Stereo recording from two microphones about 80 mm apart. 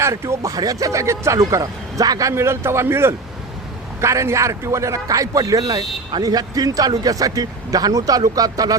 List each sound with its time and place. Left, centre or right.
0.0 s speech: right
2.3 s speech: right
6.1 s speech: right